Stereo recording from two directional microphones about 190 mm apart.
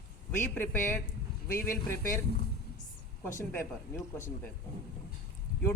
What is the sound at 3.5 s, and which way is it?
Speech, 10° left (ahead or behind).